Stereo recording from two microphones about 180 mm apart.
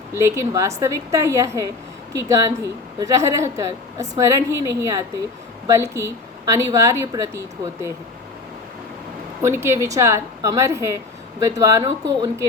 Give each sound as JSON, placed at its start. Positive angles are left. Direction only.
{"t": 0.1, "sound": "a woman's voice", "side_deg": -15}
{"t": 9.4, "sound": "a woman's voice", "side_deg": -15}